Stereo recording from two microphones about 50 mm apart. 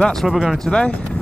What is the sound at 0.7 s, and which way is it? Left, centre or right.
Speech, centre.